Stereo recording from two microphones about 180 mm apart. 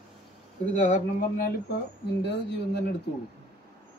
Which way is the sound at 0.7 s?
45° left (ahead or behind).